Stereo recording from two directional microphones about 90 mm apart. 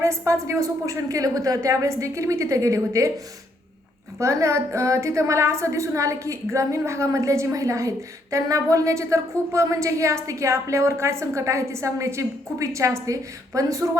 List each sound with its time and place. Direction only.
0.0 s a woman's voice: 35° right (ahead or behind)
4.2 s a woman's voice: 35° right (ahead or behind)